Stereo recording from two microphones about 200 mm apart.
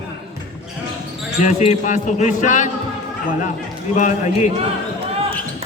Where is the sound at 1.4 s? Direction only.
35° left (ahead or behind).